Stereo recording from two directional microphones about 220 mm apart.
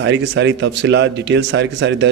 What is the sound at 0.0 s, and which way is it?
Speech, 55° right (ahead or behind).